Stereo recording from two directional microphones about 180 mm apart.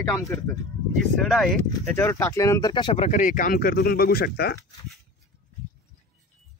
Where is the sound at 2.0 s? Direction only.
15° left (ahead or behind); by 4.6 s 60° left (ahead or behind).